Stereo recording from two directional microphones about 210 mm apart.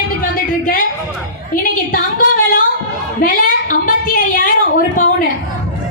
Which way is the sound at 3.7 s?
40° left (ahead or behind).